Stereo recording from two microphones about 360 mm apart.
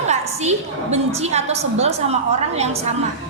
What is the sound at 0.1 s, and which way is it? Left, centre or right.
A woman's voice, centre.